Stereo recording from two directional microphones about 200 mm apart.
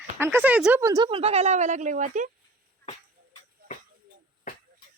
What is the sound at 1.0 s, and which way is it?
A woman's voice, 30° right (ahead or behind).